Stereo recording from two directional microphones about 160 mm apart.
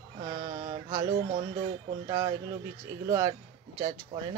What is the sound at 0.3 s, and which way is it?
Mantra, 35° right (ahead or behind).